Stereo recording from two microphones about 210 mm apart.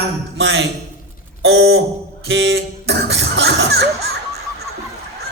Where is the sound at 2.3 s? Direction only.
60° right (ahead or behind).